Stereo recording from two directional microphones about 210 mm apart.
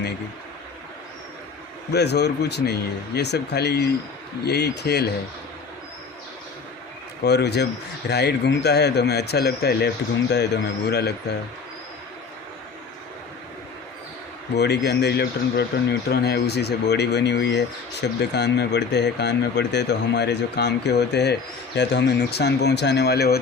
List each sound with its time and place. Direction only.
1.9 s speech: 50° left (ahead or behind)
7.3 s speech: 50° left (ahead or behind)
14.5 s speech: 50° left (ahead or behind)